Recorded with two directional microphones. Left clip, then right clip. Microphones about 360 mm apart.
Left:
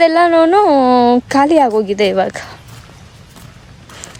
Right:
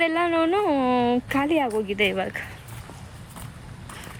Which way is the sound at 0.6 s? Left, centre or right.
Centre.